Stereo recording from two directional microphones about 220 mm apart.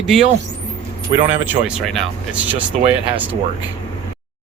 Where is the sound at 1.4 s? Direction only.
Centre (ahead or behind).